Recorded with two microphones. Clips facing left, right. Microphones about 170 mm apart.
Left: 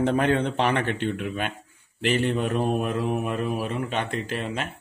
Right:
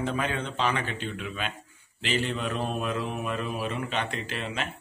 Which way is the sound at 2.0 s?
55° left (ahead or behind).